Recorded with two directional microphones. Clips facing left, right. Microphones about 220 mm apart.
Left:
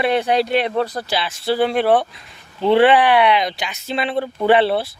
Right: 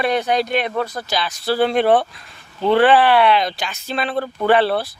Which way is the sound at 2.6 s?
25° left (ahead or behind).